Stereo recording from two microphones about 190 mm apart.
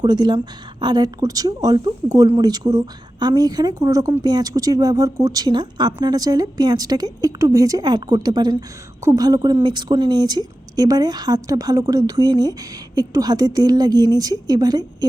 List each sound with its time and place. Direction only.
0.0 s speech: 20° right (ahead or behind)